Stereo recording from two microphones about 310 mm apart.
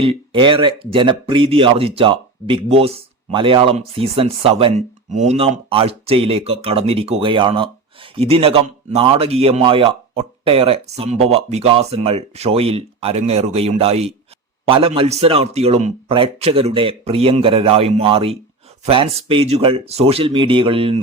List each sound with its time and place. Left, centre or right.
0.0 s a man's voice: centre